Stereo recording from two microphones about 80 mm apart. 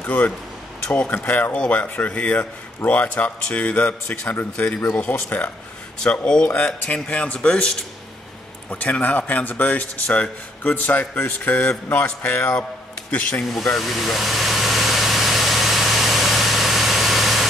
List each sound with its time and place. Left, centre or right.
0.0 s a man's voice: left
1.5 s a man's voice: centre
13.7 s engine: centre